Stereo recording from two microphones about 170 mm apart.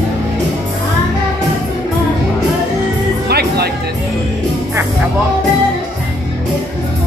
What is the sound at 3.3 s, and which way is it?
Music, 70° right (ahead or behind).